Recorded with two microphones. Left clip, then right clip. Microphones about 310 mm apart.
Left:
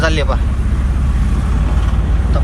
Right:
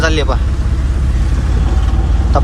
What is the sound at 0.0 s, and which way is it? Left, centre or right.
Speech, centre.